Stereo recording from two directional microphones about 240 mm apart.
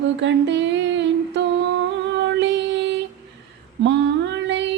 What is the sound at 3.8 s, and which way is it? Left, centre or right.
Mantra, right.